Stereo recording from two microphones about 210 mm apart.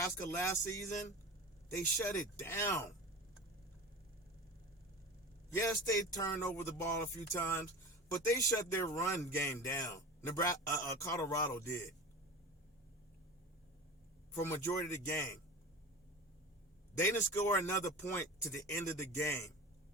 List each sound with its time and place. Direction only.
0.0 s a man's voice: 10° left (ahead or behind)
5.5 s a man's voice: 15° left (ahead or behind)
8.1 s a man's voice: 15° left (ahead or behind)
14.3 s a man's voice: 15° left (ahead or behind)
17.0 s a man's voice: 10° left (ahead or behind)